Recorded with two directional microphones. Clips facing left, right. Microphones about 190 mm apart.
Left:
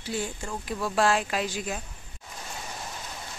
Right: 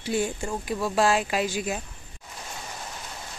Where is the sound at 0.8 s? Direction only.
5° right (ahead or behind).